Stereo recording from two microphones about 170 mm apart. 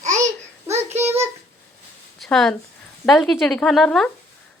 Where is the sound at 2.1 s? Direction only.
5° left (ahead or behind).